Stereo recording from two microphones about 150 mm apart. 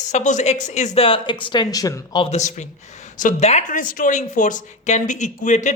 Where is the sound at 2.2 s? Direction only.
50° left (ahead or behind).